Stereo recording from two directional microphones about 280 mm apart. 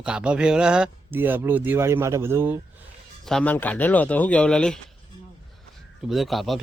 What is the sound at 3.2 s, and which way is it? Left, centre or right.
Speech, centre.